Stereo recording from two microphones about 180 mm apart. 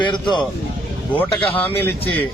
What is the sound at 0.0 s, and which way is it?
Speech, 25° left (ahead or behind).